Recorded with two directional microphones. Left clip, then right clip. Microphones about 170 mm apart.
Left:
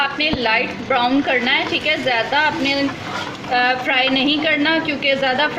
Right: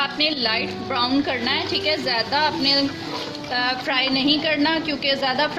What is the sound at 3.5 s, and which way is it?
A woman's voice, 55° right (ahead or behind).